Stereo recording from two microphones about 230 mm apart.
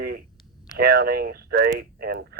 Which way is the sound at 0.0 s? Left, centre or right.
Right.